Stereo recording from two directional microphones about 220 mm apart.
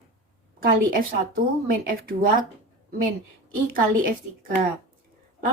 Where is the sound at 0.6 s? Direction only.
40° right (ahead or behind).